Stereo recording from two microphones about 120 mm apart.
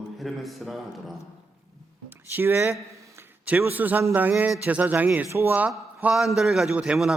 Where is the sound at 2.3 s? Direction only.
20° right (ahead or behind).